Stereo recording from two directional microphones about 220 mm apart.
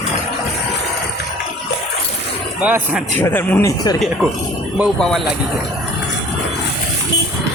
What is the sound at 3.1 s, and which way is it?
Speech, 10° left (ahead or behind).